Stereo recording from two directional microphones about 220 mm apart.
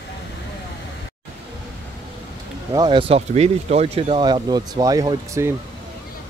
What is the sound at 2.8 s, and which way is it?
Speech, 25° right (ahead or behind).